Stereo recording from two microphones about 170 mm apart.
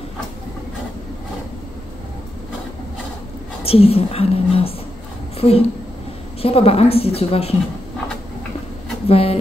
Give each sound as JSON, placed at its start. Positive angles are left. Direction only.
{"t": 3.6, "sound": "a woman's voice", "side_deg": 35}
{"t": 9.0, "sound": "speech", "side_deg": 35}